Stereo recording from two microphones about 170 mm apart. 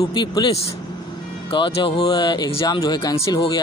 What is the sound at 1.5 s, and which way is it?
Speech, 30° left (ahead or behind).